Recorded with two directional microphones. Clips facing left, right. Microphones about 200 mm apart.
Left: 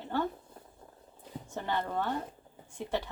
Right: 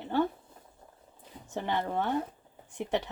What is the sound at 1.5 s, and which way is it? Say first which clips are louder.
A woman's voice: right 2 dB; 15° right (ahead or behind).